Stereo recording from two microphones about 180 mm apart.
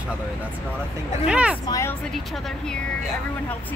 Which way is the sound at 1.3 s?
5° right (ahead or behind).